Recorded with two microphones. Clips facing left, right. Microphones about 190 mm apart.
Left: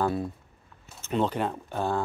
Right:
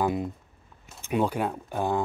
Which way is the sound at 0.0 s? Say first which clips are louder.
Right 1 dB; 15° right (ahead or behind).